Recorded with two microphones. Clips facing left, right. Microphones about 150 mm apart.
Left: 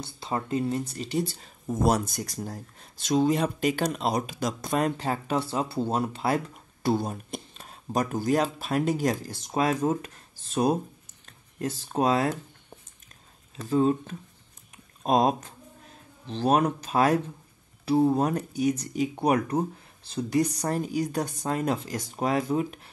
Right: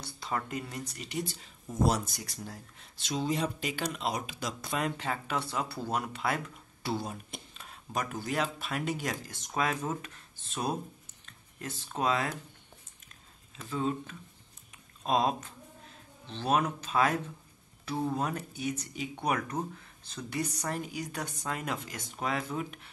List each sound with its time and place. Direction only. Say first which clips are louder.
0.0 s speech: left 4 dB; 25° left (ahead or behind)
1.7 s speech: left 5 dB; 50° left (ahead or behind)
13.6 s speech: left 9 dB; 40° left (ahead or behind)